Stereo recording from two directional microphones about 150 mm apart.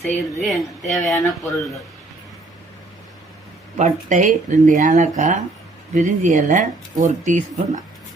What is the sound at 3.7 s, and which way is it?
Speech, 55° right (ahead or behind).